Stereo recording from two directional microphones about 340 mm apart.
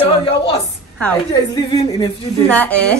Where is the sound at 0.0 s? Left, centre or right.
Centre.